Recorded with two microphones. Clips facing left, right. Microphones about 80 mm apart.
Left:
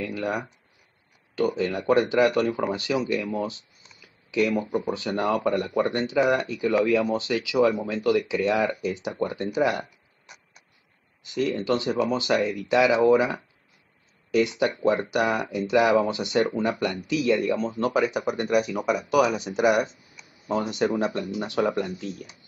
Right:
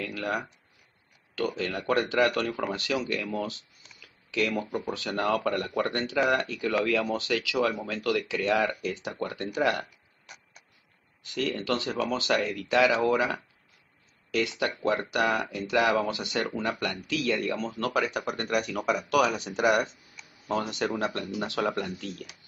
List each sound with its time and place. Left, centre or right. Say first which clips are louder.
0.0 s speech: left 3 dB; centre